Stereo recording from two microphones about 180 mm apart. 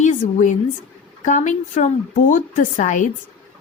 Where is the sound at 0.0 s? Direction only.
40° left (ahead or behind).